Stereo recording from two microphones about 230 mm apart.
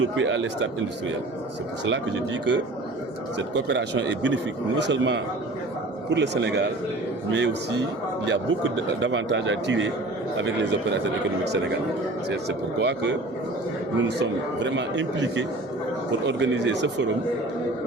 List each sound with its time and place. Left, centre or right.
0.0 s a man's voice: right
12.5 s a man's voice: right